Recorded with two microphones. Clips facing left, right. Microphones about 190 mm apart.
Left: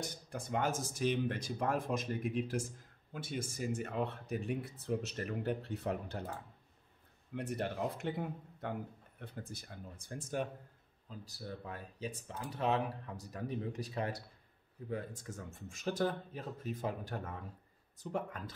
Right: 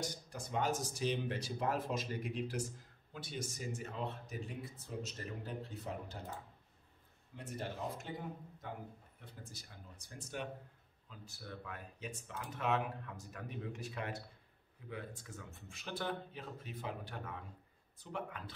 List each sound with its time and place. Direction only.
0.3 s speech: 50° left (ahead or behind)
7.3 s speech: 65° left (ahead or behind); by 18.4 s 45° left (ahead or behind)